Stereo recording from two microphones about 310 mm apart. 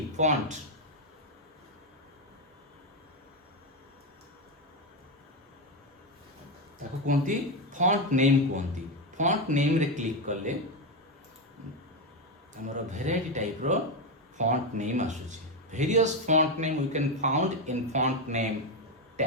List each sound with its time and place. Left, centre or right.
0.2 s speech: right
7.1 s speech: right
12.6 s speech: right